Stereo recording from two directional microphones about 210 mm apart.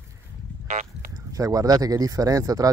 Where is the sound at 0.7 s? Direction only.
35° right (ahead or behind).